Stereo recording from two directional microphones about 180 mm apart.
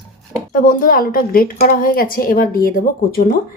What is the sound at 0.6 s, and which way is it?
Speech, 50° left (ahead or behind).